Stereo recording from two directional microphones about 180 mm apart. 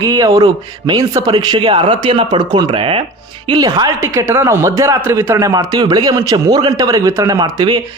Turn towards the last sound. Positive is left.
turn(degrees=-25)  # may be behind; listen again after turning